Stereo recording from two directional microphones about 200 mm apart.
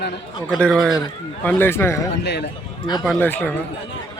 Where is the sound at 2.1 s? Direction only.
55° left (ahead or behind).